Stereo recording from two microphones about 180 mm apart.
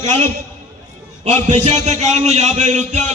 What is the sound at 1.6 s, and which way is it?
A man's voice, 35° right (ahead or behind).